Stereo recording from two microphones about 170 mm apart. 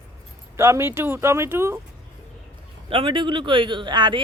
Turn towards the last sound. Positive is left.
turn(degrees=-25)  # may be behind; listen again after turning